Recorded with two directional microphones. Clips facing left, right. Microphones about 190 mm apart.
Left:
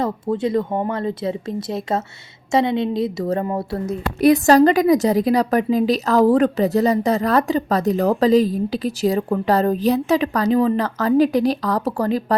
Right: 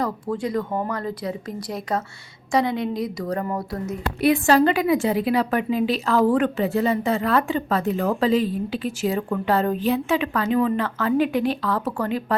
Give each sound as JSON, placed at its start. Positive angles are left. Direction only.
{"t": 0.0, "sound": "speech", "side_deg": 25}
{"t": 4.2, "sound": "a woman's voice", "side_deg": 40}